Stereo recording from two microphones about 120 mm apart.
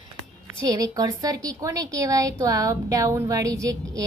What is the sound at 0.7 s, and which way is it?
A woman's voice, 30° right (ahead or behind).